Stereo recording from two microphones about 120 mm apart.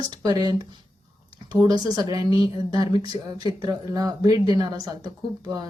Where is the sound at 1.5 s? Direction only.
35° right (ahead or behind).